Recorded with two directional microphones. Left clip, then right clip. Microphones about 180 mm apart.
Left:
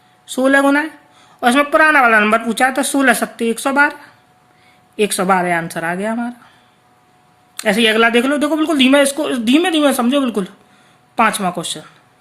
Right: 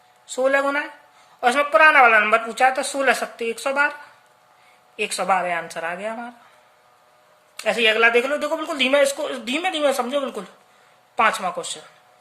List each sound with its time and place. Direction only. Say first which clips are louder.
0.3 s a man's voice: left 6 dB; 25° left (ahead or behind)
4.9 s a man's voice: left 6 dB; 20° left (ahead or behind)
7.5 s a man's voice: left 5 dB; 25° left (ahead or behind)